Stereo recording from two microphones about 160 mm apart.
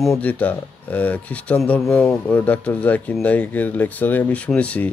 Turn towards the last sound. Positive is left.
turn(degrees=10)  # may be behind; listen again after turning